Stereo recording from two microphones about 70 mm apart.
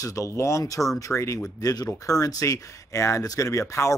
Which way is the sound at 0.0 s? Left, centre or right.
Left.